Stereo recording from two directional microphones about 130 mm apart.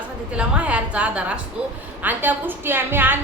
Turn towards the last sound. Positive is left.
turn(degrees=-15)  # may be behind; listen again after turning